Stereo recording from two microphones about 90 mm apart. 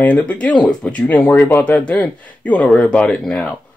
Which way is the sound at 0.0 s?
15° left (ahead or behind).